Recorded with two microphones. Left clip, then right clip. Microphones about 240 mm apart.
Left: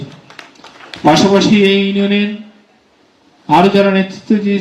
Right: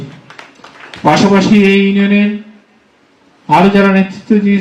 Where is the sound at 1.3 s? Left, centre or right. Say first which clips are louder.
Right 1 dB; left.